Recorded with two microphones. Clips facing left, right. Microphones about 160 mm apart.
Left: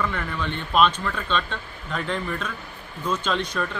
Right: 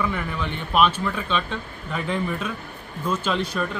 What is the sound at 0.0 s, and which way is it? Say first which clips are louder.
Speech: right 1 dB; 10° right (ahead or behind).